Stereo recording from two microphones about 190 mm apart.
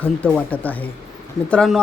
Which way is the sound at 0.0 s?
10° left (ahead or behind).